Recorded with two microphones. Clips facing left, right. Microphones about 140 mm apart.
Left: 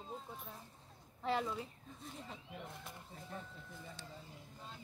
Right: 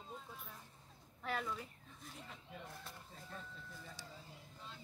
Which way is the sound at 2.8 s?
15° left (ahead or behind).